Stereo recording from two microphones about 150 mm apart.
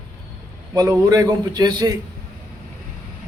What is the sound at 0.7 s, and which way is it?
A man's voice, 25° right (ahead or behind).